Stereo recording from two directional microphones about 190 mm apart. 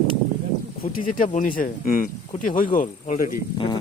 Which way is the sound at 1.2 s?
40° left (ahead or behind).